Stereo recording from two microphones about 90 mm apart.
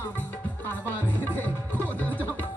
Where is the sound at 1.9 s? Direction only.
20° left (ahead or behind).